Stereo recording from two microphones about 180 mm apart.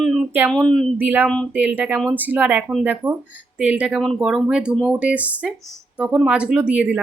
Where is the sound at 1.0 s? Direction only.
10° right (ahead or behind).